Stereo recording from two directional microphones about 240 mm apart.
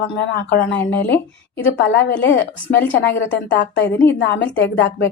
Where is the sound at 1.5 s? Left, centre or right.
Left.